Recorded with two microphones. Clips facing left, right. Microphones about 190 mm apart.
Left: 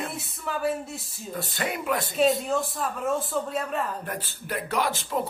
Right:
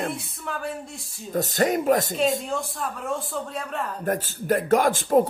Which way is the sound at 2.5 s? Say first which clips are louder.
Left 2 dB; 5° left (ahead or behind).